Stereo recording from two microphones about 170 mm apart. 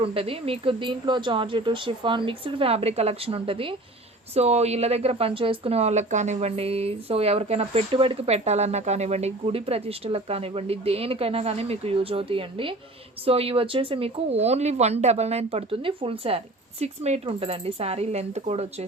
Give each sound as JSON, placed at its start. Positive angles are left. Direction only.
{"t": 0.0, "sound": "a woman's voice", "side_deg": -35}